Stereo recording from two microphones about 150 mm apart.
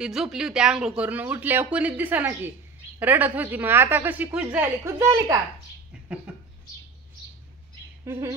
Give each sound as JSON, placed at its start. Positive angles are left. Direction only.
{"t": 0.0, "sound": "a woman's voice", "side_deg": -5}
{"t": 6.3, "sound": "a sound", "side_deg": -10}
{"t": 8.0, "sound": "speech", "side_deg": -15}